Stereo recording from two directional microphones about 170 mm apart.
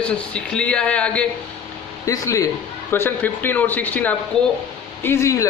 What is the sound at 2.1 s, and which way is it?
A man's voice, 20° left (ahead or behind).